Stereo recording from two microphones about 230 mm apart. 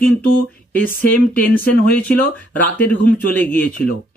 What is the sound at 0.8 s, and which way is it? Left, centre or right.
Speech, left.